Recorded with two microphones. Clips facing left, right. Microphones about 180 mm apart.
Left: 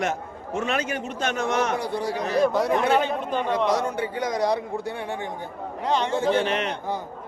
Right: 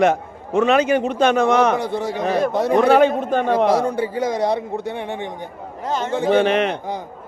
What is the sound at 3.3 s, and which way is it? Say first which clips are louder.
Speech: right 6 dB; 50° right (ahead or behind).